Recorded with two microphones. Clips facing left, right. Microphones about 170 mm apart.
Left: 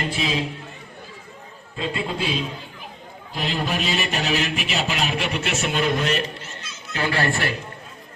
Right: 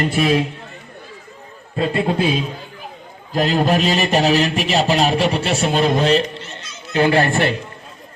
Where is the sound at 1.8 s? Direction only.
55° right (ahead or behind).